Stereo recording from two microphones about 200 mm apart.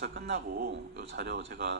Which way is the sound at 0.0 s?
50° right (ahead or behind).